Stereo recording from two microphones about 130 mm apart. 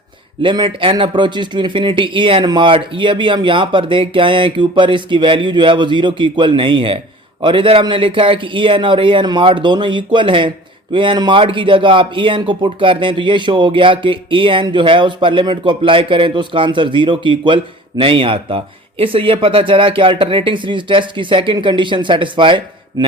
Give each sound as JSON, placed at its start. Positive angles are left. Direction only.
{"t": 0.4, "sound": "speech", "side_deg": -40}